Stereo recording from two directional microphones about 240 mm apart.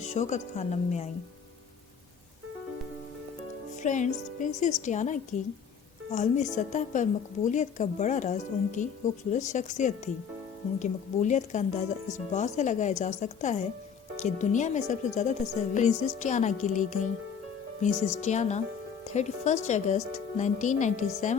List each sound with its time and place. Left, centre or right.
0.0 s speech: left
3.8 s a woman's voice: left